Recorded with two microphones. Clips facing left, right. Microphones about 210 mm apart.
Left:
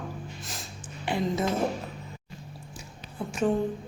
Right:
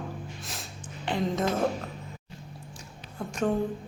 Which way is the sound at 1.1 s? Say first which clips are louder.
Left 1 dB; 10° left (ahead or behind).